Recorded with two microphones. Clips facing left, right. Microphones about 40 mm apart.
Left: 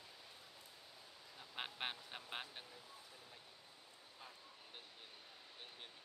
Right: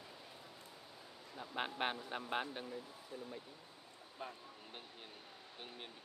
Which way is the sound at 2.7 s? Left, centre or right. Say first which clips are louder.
Right 10 dB; right.